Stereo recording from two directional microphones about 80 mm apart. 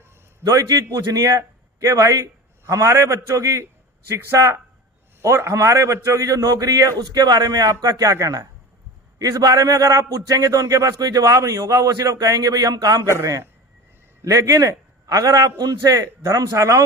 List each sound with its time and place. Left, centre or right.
0.4 s a man's voice: right
5.2 s a man's voice: right
13.1 s a man's voice: right